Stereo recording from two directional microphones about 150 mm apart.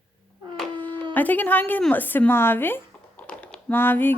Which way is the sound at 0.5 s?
10° left (ahead or behind).